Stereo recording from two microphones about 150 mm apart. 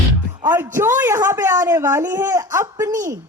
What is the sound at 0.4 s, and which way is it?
A woman's voice, 15° right (ahead or behind).